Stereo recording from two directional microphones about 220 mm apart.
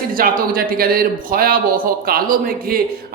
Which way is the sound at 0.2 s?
40° right (ahead or behind).